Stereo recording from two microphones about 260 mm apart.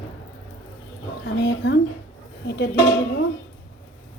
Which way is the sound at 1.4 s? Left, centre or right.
Left.